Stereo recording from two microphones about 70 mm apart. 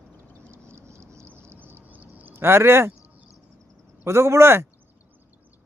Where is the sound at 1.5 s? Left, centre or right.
Right.